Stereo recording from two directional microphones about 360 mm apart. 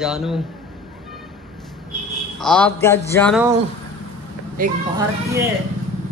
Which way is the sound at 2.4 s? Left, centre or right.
Centre.